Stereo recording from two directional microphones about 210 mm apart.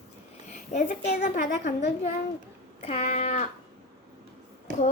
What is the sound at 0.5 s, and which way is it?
A woman's voice, 35° left (ahead or behind).